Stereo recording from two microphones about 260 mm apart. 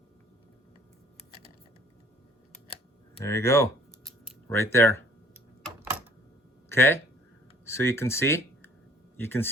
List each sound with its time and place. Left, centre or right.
3.2 s speech: centre
6.7 s speech: centre